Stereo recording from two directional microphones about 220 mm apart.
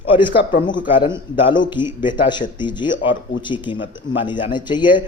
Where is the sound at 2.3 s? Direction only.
20° left (ahead or behind).